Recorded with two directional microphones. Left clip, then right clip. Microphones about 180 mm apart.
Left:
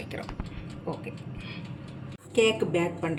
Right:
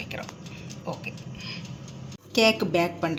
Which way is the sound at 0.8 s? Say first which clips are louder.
Right 1 dB; 10° left (ahead or behind).